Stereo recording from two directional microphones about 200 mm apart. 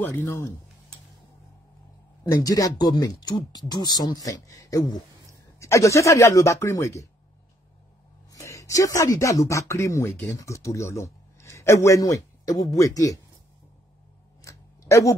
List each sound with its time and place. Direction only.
0.0 s speech: 10° left (ahead or behind)
2.3 s speech: 20° left (ahead or behind)
8.3 s speech: 15° left (ahead or behind)
14.4 s a sound: 15° left (ahead or behind)